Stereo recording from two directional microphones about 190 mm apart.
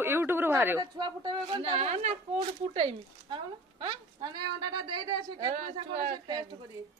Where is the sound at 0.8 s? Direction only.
25° right (ahead or behind).